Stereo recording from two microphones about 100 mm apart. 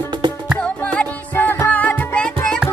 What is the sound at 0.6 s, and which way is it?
Music, 15° left (ahead or behind).